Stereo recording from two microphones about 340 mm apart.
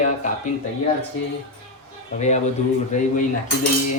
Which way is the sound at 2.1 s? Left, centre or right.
Centre.